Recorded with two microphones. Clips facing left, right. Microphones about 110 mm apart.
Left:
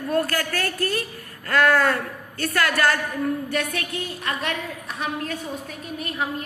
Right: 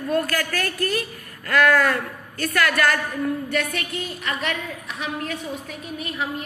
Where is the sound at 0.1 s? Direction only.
30° left (ahead or behind).